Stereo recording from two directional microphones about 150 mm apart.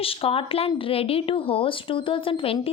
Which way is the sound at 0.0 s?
40° left (ahead or behind).